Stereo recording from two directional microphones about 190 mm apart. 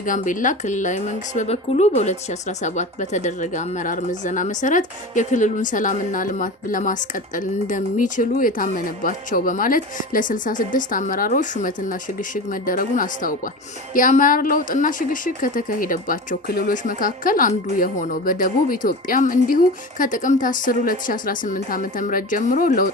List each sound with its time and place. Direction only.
0.0 s a woman's voice: 45° left (ahead or behind)